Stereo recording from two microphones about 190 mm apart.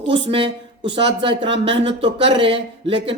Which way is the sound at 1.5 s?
70° right (ahead or behind).